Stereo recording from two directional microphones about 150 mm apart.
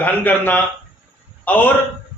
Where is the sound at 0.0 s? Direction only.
10° left (ahead or behind).